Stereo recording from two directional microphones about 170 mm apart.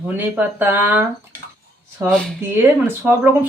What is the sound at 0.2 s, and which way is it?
Speech, 10° right (ahead or behind).